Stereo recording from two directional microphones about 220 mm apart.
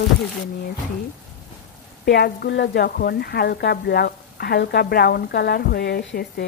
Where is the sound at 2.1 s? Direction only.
45° left (ahead or behind).